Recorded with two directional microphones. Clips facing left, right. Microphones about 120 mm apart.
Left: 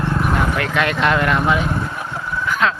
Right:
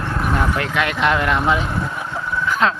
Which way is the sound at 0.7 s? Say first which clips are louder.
Left 1 dB; 15° right (ahead or behind).